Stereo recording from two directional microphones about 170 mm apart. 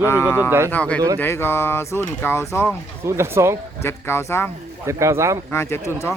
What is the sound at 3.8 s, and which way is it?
Speech, 15° left (ahead or behind).